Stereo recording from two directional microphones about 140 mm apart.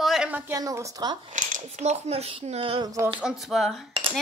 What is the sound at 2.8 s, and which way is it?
Speech, 20° right (ahead or behind).